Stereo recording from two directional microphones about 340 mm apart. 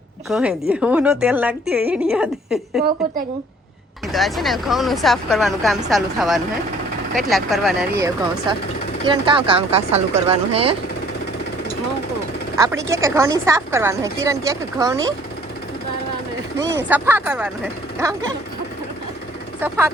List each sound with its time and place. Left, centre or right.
0.3 s speech: centre
4.1 s a woman's voice: centre
12.5 s a woman's voice: centre
16.9 s speech: centre
19.6 s a woman's voice: centre